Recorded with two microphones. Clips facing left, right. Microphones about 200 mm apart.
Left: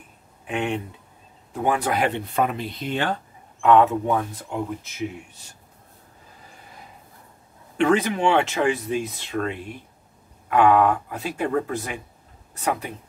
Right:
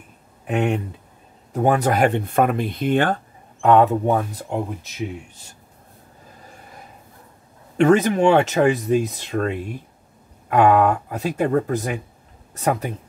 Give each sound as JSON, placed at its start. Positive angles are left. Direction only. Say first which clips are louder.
{"t": 0.5, "sound": "speech", "louder": "right 5 dB", "side_deg": -45}
{"t": 3.6, "sound": "speech", "louder": "right 2 dB", "side_deg": -40}
{"t": 7.7, "sound": "speech", "louder": "right 5 dB", "side_deg": -45}
{"t": 10.5, "sound": "speech", "louder": "right 2 dB", "side_deg": -45}